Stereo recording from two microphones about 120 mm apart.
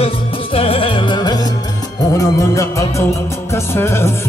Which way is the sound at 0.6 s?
50° left (ahead or behind).